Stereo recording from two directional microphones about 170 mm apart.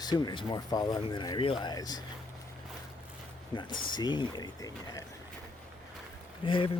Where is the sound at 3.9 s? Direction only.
25° left (ahead or behind).